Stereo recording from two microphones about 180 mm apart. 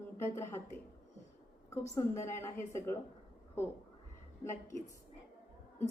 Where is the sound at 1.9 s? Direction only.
15° left (ahead or behind).